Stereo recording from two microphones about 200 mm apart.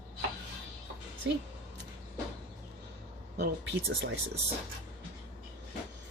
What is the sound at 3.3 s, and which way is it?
Speech, 60° right (ahead or behind).